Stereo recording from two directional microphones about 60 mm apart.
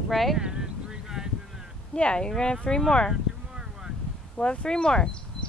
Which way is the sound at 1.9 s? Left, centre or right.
Centre.